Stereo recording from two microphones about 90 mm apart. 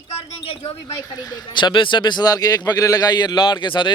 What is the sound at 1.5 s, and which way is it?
A man's voice, 65° left (ahead or behind).